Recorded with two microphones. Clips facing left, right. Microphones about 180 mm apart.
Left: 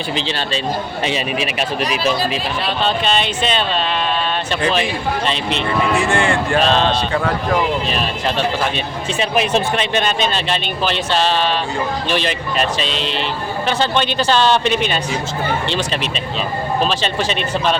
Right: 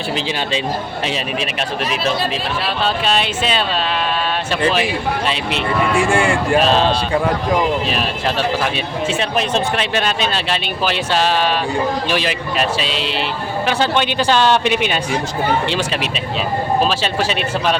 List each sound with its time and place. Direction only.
0.2 s speech: 10° right (ahead or behind)
1.0 s speech: centre (ahead or behind)
2.8 s speech: 5° right (ahead or behind)
4.6 s speech: 5° right (ahead or behind)
9.1 s speech: 5° left (ahead or behind)
9.7 s speech: 5° right (ahead or behind)
16.8 s speech: 5° right (ahead or behind)